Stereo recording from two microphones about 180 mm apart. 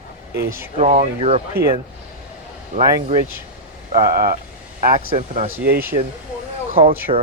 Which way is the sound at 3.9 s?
55° right (ahead or behind).